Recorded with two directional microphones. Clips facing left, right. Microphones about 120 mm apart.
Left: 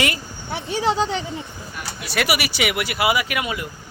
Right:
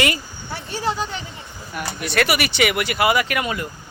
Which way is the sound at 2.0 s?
5° left (ahead or behind).